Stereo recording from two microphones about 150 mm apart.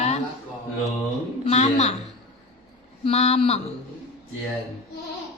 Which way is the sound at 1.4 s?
45° left (ahead or behind).